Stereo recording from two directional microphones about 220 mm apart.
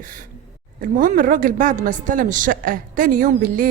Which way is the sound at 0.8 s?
40° right (ahead or behind).